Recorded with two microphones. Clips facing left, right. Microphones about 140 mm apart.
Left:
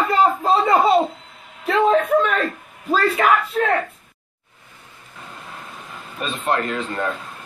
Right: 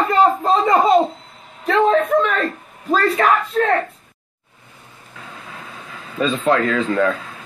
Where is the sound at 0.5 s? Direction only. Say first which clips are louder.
Right 2 dB; 40° right (ahead or behind).